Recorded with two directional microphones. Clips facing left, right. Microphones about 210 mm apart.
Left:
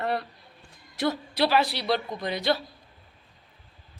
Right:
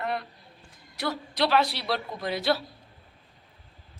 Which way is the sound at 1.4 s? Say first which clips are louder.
Even; 5° left (ahead or behind).